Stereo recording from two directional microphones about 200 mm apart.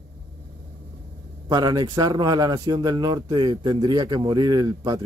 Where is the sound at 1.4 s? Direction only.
20° right (ahead or behind).